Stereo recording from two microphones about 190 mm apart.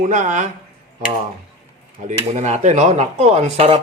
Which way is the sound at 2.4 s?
35° right (ahead or behind).